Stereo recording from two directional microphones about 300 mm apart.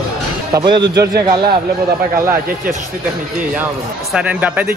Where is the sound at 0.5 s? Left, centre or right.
Centre.